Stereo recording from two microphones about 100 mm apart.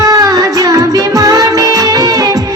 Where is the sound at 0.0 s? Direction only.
40° right (ahead or behind).